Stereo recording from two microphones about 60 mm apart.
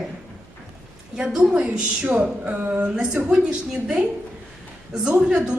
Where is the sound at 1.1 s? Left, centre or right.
Centre.